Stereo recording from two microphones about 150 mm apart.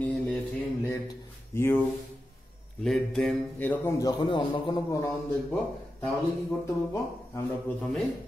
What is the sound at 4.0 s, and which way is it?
A man's voice, 30° left (ahead or behind).